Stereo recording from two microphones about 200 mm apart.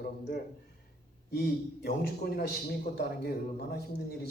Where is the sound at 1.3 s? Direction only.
50° left (ahead or behind).